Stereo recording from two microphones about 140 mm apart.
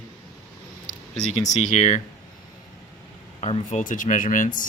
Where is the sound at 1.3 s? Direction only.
55° left (ahead or behind).